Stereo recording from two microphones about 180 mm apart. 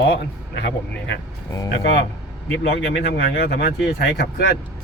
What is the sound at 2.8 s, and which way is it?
Speech, 80° left.